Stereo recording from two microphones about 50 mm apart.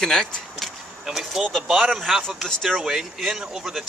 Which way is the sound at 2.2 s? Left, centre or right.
Centre.